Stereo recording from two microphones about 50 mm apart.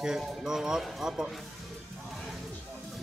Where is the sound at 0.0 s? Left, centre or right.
Centre.